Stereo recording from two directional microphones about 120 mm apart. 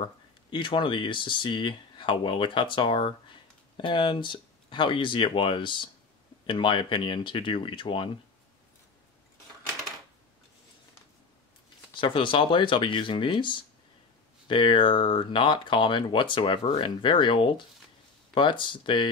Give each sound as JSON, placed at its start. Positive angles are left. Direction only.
{"t": 0.5, "sound": "speech", "side_deg": 45}
{"t": 11.9, "sound": "speech", "side_deg": 45}